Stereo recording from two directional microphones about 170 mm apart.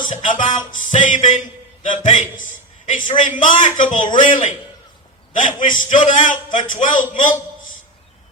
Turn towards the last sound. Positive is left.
turn(degrees=50)  # may be behind; listen again after turning